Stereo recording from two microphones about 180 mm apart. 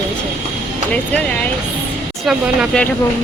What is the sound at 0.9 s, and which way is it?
Speech, 5° left (ahead or behind).